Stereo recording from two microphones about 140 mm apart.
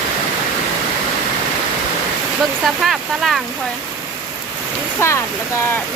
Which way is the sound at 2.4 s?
Centre (ahead or behind).